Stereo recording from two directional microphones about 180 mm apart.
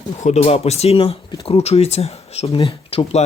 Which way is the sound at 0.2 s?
40° left (ahead or behind).